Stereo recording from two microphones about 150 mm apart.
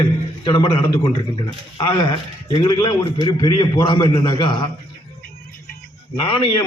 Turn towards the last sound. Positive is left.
turn(degrees=30)  # may be behind; listen again after turning